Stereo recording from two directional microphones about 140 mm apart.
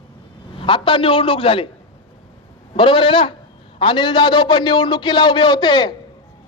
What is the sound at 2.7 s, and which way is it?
Speech, 35° left (ahead or behind).